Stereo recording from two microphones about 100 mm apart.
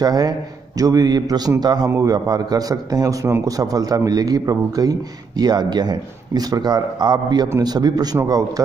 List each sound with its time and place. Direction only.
0.0 s a man's voice: 40° right (ahead or behind)